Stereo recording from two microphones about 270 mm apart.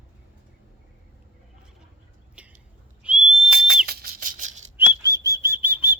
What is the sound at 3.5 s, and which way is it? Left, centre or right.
Whistle, right.